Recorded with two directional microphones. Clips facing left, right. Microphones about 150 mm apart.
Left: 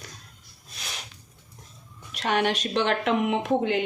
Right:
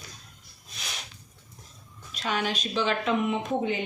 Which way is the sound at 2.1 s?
65° left (ahead or behind).